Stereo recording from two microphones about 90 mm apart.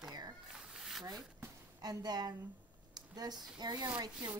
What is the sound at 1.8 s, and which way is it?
Speech, 50° right (ahead or behind).